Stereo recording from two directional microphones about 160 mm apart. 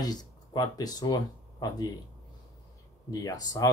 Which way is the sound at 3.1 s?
25° left (ahead or behind).